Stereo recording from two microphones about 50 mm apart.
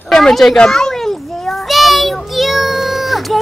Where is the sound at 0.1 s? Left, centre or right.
Centre.